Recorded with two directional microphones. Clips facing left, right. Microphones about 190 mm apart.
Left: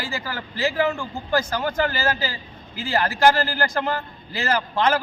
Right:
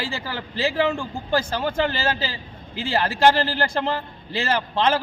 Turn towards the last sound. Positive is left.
turn(degrees=-30)  # may be behind; listen again after turning